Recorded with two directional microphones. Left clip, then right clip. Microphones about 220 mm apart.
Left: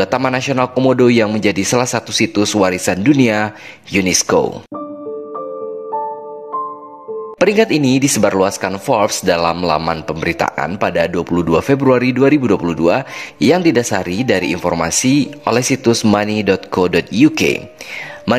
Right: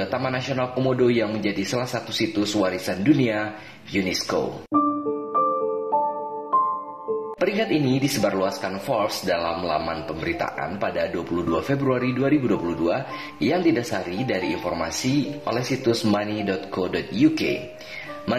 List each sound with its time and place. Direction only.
0.0 s speech: 50° left (ahead or behind)
7.3 s speech: 50° left (ahead or behind)